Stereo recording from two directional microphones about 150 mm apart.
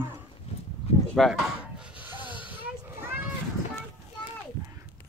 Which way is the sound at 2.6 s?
15° right (ahead or behind).